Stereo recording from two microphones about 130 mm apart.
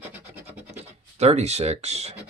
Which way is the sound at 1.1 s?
55° right (ahead or behind).